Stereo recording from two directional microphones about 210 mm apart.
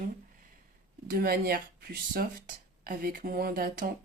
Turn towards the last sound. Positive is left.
turn(degrees=-45)  # may be behind; listen again after turning